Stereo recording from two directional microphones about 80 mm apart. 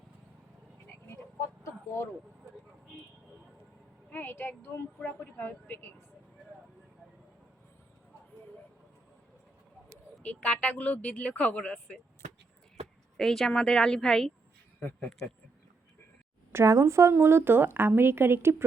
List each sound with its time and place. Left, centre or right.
1.0 s frog: left
4.1 s speech: left
10.2 s speech: centre
13.1 s speech: centre
14.8 s speech: left
16.5 s a woman's voice: right